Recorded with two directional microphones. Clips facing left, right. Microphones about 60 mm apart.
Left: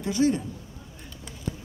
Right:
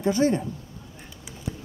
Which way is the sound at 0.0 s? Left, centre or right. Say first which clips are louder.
Right 2 dB; right.